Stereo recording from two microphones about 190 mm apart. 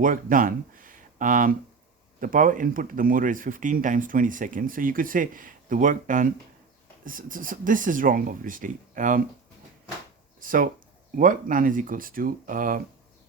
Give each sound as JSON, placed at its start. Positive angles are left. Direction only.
{"t": 0.0, "sound": "speech", "side_deg": -45}
{"t": 10.4, "sound": "speech", "side_deg": -45}